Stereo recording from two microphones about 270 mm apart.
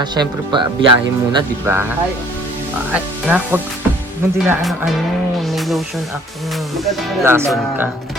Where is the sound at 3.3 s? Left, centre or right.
Centre.